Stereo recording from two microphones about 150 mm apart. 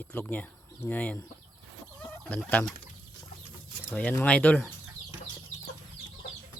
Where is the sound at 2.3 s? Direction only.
10° left (ahead or behind).